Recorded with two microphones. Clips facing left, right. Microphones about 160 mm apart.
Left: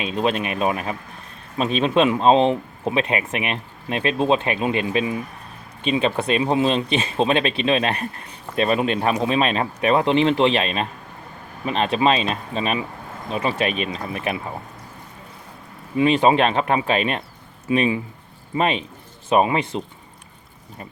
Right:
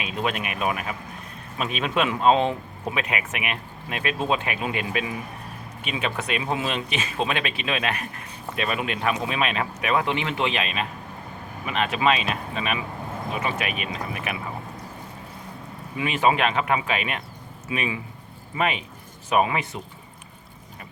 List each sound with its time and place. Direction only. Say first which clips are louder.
0.0 s speech: left 6 dB; 25° left (ahead or behind)
16.0 s speech: left 6 dB; 30° left (ahead or behind)